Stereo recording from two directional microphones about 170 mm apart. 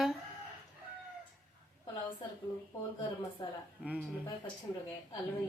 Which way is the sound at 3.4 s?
20° left (ahead or behind).